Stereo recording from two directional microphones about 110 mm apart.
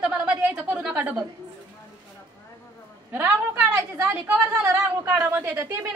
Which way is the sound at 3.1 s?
20° right (ahead or behind).